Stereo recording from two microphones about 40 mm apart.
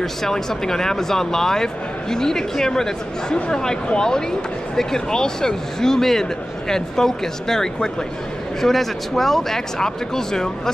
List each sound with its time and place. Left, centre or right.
0.0 s speech: centre